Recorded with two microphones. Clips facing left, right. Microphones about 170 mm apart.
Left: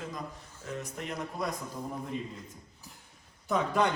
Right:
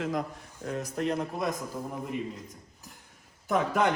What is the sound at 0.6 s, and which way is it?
Speech, 40° right (ahead or behind).